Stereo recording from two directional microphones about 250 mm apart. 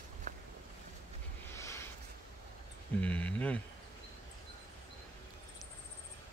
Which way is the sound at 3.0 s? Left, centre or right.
Centre.